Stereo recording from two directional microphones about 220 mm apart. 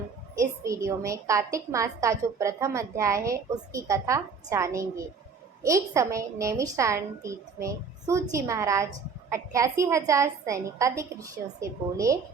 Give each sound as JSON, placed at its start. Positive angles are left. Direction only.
{"t": 0.3, "sound": "a woman's voice", "side_deg": -15}